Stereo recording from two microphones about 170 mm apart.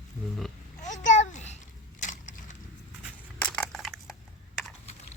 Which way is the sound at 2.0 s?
45° left (ahead or behind).